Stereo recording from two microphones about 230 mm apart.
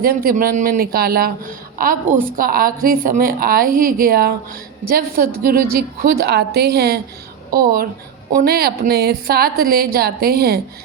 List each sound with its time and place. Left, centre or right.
0.0 s a man's voice: right